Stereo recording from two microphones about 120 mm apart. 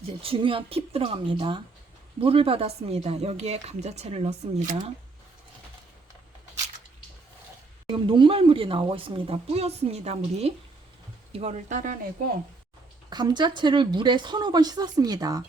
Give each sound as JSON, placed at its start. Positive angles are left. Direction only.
{"t": 0.2, "sound": "a woman's voice", "side_deg": -50}
{"t": 7.9, "sound": "a woman's voice", "side_deg": -45}
{"t": 13.1, "sound": "a woman's voice", "side_deg": -35}